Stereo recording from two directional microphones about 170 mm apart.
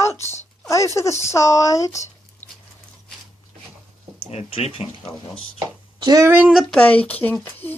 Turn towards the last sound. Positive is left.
turn(degrees=10)  # may be behind; listen again after turning